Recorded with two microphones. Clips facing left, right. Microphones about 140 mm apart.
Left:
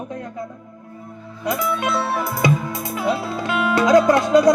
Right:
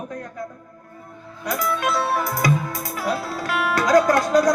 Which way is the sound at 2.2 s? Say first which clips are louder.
Left 2 dB; 25° left (ahead or behind).